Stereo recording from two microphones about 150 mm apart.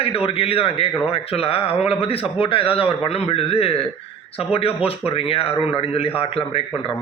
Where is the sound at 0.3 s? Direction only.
40° left (ahead or behind).